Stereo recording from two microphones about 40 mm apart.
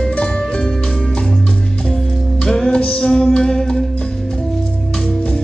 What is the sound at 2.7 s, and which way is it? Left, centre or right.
Music, left.